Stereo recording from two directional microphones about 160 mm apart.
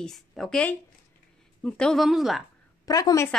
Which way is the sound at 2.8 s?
20° left (ahead or behind).